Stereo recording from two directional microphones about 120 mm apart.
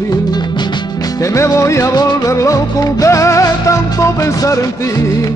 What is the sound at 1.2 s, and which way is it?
Music, 25° left (ahead or behind).